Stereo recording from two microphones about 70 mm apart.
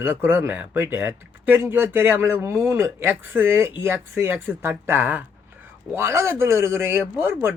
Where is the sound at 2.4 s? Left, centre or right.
Right.